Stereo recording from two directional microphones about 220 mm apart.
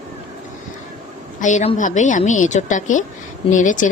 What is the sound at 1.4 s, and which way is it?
Speech, 30° left (ahead or behind).